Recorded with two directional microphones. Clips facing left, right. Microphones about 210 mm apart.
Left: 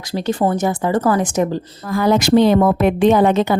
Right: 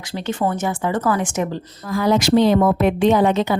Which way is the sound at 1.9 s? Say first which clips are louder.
Left 2 dB; 55° left (ahead or behind).